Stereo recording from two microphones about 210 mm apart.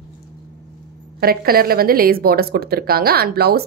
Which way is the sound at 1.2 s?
45° right (ahead or behind).